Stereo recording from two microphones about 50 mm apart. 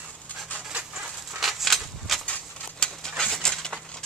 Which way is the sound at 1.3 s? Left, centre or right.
Centre.